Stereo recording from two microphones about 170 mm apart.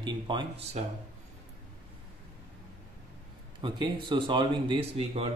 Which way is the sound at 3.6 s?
30° right (ahead or behind).